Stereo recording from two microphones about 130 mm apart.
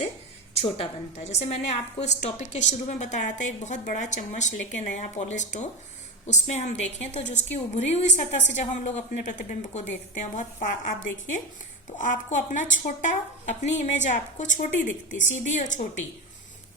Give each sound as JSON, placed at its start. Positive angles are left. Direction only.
{"t": 0.5, "sound": "a woman's voice", "side_deg": 50}